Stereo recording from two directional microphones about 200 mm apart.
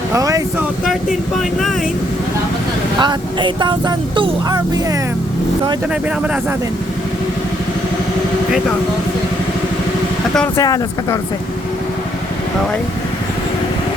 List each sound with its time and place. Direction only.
0.1 s speech: 15° right (ahead or behind)
3.0 s speech: 20° right (ahead or behind)
5.9 s speech: 5° right (ahead or behind)
10.6 s speech: 20° left (ahead or behind)